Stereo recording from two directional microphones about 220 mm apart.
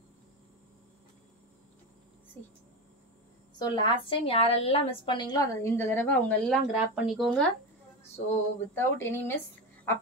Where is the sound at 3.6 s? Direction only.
20° left (ahead or behind); by 7.5 s centre (ahead or behind).